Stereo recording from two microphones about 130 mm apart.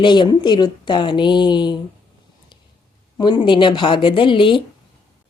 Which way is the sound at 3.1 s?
35° left (ahead or behind).